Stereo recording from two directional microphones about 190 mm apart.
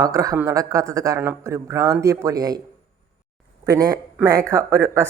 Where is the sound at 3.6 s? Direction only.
20° right (ahead or behind).